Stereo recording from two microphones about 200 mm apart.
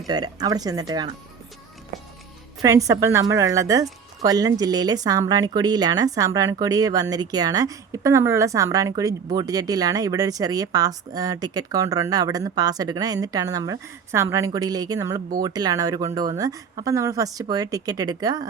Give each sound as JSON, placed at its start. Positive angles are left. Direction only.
{"t": 0.1, "sound": "speech", "side_deg": -20}
{"t": 2.6, "sound": "speech", "side_deg": -15}